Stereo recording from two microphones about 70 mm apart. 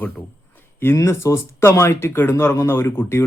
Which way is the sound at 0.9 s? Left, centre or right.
Left.